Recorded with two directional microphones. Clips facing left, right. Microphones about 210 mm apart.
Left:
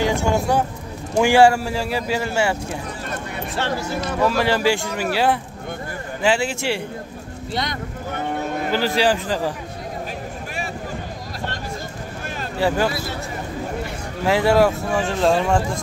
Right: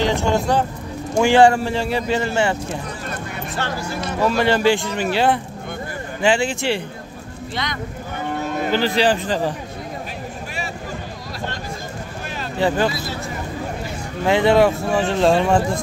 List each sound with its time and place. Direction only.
0.0 s speech: 10° left (ahead or behind)
3.5 s speech: 25° left (ahead or behind)
4.3 s speech: 5° left (ahead or behind)
8.7 s speech: 5° left (ahead or behind)
12.5 s speech: 5° left (ahead or behind)
14.2 s speech: 5° left (ahead or behind)